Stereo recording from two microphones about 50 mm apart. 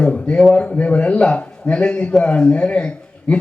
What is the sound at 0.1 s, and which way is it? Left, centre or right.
A man's voice, left.